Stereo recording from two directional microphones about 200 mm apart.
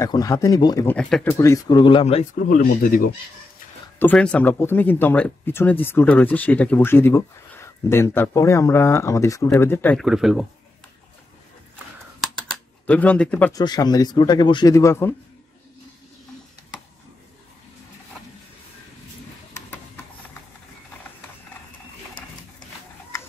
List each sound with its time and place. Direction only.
0.0 s speech: 15° left (ahead or behind)
0.9 s speech: 5° left (ahead or behind)
1.4 s speech: 15° left (ahead or behind)
2.3 s speech: 45° left (ahead or behind)
4.0 s speech: 5° left (ahead or behind)
12.8 s speech: 5° left (ahead or behind)
13.5 s speech: 20° left (ahead or behind)
19.5 s printer: 10° left (ahead or behind)